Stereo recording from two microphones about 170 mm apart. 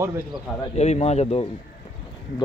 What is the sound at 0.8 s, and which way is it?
Speech, 40° left (ahead or behind).